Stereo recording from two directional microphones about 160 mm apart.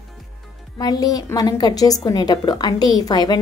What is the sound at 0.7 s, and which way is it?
A woman's voice, 25° left (ahead or behind).